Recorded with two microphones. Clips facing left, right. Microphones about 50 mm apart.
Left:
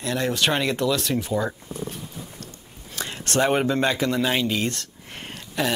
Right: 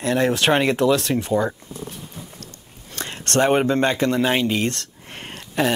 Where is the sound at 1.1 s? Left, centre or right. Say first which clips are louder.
Right 3 dB; centre.